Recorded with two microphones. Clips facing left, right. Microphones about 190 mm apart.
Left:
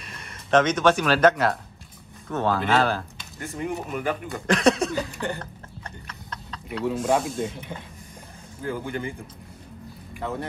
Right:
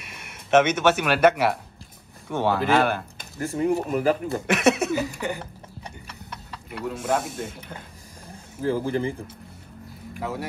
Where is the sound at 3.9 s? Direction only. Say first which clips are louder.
Right 6 dB; 30° right (ahead or behind).